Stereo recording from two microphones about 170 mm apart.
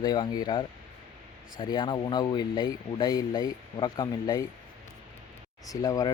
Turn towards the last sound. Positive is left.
turn(degrees=20)  # may be behind; listen again after turning